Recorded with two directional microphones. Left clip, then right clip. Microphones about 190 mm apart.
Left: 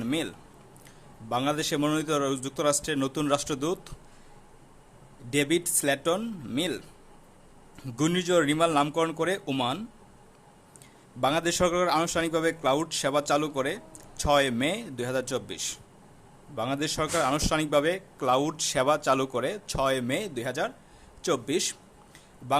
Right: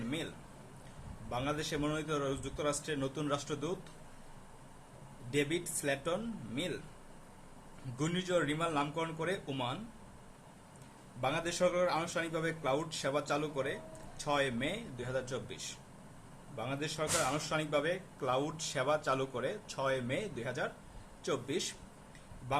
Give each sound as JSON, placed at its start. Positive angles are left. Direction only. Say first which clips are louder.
{"t": 0.0, "sound": "speech", "louder": "left 10 dB", "side_deg": 55}
{"t": 1.3, "sound": "a man's voice", "louder": "left 9 dB", "side_deg": 55}
{"t": 5.3, "sound": "a man's voice", "louder": "left 8 dB", "side_deg": 55}
{"t": 7.9, "sound": "a man's voice", "louder": "left 9 dB", "side_deg": 55}
{"t": 11.2, "sound": "a man's voice", "louder": "left 8 dB", "side_deg": 55}